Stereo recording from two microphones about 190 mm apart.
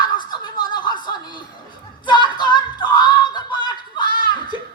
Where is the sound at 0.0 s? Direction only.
20° left (ahead or behind).